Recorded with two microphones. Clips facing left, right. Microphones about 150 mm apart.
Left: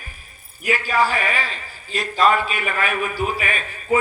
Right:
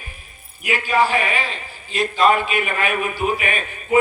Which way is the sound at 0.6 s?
40° left (ahead or behind).